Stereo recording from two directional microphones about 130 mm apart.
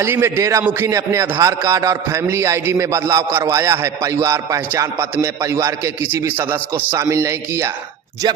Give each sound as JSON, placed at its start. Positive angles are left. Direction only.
{"t": 0.0, "sound": "a man's voice", "side_deg": -20}